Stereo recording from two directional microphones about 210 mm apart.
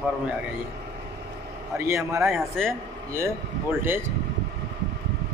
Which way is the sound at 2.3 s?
Centre (ahead or behind).